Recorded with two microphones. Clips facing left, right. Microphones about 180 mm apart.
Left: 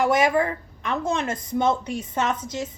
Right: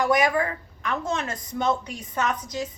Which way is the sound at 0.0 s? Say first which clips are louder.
Left 2 dB; 25° left (ahead or behind).